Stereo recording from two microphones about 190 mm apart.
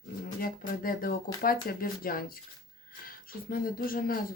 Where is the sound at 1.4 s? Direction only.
50° left (ahead or behind).